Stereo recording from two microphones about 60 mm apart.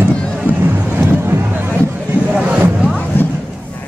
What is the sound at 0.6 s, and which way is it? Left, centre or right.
Boat, right.